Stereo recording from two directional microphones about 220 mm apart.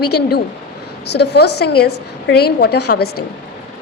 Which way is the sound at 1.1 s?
50° left (ahead or behind).